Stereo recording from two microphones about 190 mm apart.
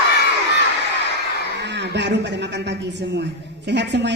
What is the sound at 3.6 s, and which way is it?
Speech, 65° right (ahead or behind).